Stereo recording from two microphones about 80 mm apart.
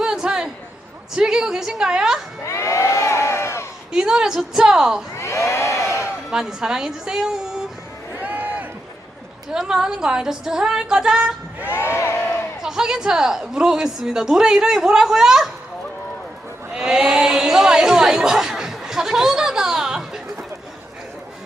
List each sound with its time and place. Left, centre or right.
0.0 s a sound: centre
1.1 s a woman's voice: centre
2.4 s crowd: left
3.9 s a woman's voice: centre
5.1 s a sound: left
6.3 s a woman's voice: centre
8.1 s run: right
9.5 s a woman's voice: centre
11.6 s crowd: left
12.6 s a woman's voice: centre
16.7 s chatter: centre